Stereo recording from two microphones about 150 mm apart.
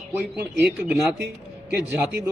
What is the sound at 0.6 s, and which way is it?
Speech, centre (ahead or behind).